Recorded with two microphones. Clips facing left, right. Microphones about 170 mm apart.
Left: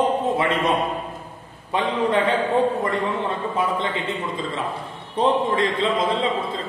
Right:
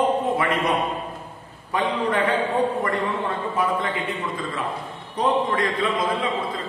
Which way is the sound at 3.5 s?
25° left (ahead or behind).